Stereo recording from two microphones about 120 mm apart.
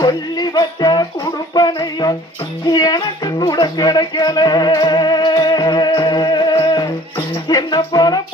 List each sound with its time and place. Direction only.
0.0 s music: 35° left (ahead or behind)